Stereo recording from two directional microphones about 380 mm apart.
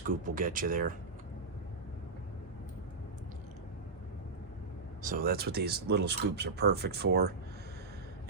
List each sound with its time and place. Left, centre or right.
0.1 s speech: right
5.0 s speech: right